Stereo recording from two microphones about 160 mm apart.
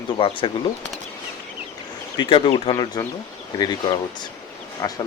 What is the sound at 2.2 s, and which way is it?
Speech, 35° left (ahead or behind).